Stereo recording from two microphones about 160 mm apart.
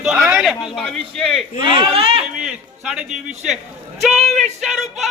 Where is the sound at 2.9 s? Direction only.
5° right (ahead or behind).